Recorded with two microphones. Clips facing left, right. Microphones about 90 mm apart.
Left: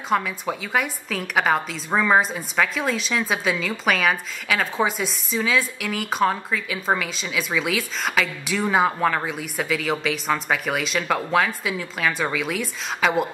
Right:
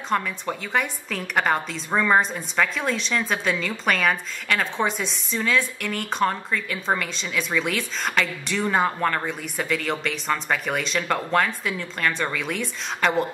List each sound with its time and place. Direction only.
0.1 s a woman's voice: 5° left (ahead or behind)